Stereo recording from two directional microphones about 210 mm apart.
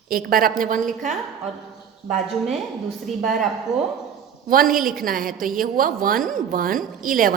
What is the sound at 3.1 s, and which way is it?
Speech, centre (ahead or behind).